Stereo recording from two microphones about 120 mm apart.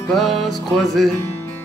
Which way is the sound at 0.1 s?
Centre (ahead or behind).